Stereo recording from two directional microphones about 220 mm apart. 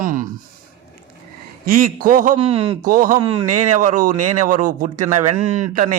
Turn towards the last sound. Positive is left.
turn(degrees=-35)  # may be behind; listen again after turning